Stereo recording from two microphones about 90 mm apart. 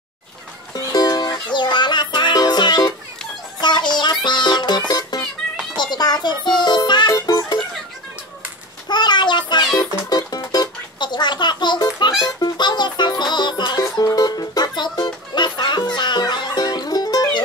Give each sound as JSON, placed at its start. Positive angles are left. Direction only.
{"t": 0.7, "sound": "music", "side_deg": 45}
{"t": 8.8, "sound": "child singing", "side_deg": 55}
{"t": 9.8, "sound": "music", "side_deg": 45}